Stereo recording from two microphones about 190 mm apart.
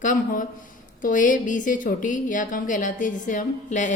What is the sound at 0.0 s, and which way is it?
A woman's voice, 45° left (ahead or behind).